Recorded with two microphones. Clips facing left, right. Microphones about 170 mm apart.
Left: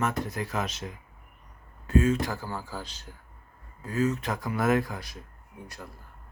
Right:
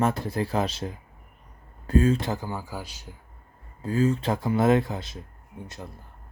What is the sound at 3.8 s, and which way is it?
Speech, 30° right (ahead or behind).